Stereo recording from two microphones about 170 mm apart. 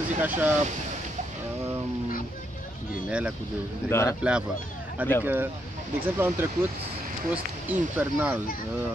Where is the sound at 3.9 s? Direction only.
15° left (ahead or behind).